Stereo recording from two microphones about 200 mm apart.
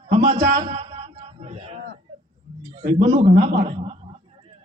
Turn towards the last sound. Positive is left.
turn(degrees=-35)  # may be behind; listen again after turning